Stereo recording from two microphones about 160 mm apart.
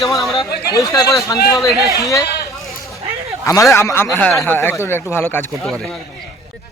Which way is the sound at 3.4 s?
20° left (ahead or behind).